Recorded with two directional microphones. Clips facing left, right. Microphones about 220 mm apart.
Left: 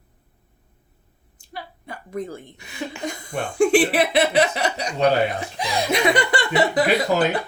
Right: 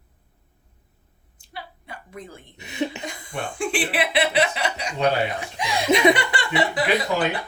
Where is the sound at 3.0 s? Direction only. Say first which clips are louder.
Left 4 dB; 45° left (ahead or behind).